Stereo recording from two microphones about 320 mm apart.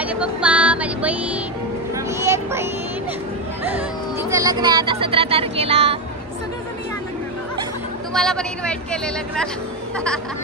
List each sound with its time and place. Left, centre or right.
0.0 s music: centre
2.0 s a sound: centre
3.6 s speech: centre
8.1 s speech: centre